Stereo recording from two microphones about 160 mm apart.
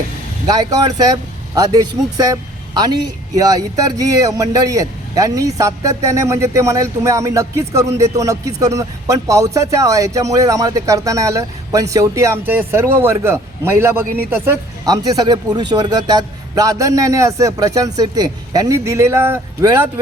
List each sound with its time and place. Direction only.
0.4 s speech: 25° right (ahead or behind)